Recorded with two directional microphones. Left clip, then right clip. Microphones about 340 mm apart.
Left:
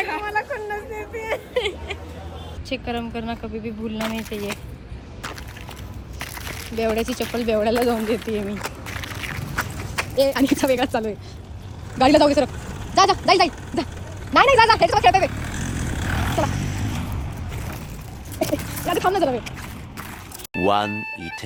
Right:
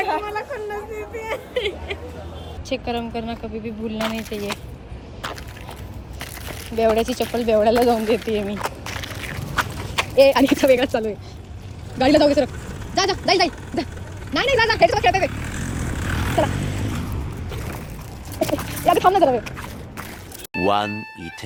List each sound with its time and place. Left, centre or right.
0.0 s speech: centre
6.1 s crumpling: centre
11.9 s a sound: centre
14.3 s vehicle: centre
18.4 s a sound: centre
20.5 s speech: centre